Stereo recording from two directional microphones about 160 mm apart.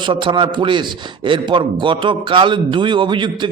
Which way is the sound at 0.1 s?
30° right (ahead or behind).